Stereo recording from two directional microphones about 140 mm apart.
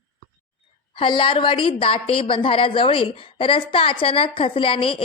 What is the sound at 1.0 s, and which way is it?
A woman's voice, 40° left (ahead or behind).